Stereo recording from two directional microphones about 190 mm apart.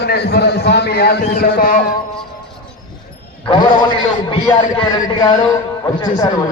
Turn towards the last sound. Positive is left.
turn(degrees=20)  # may be behind; listen again after turning